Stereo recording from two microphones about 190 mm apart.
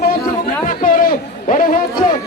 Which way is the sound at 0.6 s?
45° left (ahead or behind).